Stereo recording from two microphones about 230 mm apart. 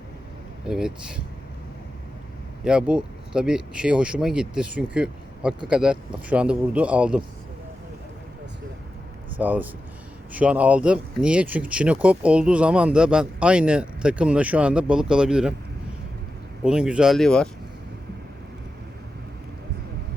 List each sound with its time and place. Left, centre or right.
0.7 s speech: centre
2.6 s speech: centre
9.4 s speech: centre
16.6 s speech: centre